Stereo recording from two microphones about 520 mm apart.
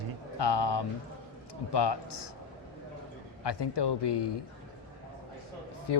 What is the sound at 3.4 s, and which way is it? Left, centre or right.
Speech, left.